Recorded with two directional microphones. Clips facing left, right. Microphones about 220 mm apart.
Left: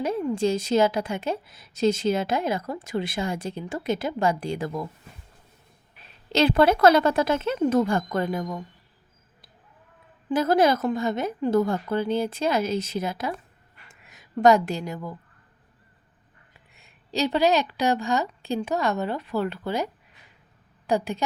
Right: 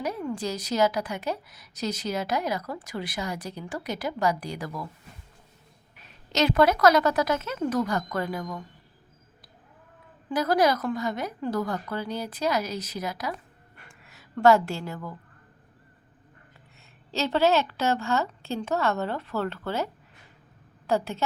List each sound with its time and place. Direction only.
0.0 s a woman's voice: 25° left (ahead or behind)
6.0 s a woman's voice: 30° left (ahead or behind)
10.2 s a woman's voice: 25° left (ahead or behind)
13.8 s a sound: 20° left (ahead or behind)
16.7 s a woman's voice: 15° left (ahead or behind)